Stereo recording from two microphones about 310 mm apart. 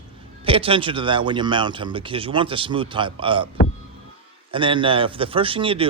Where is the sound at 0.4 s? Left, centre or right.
Centre.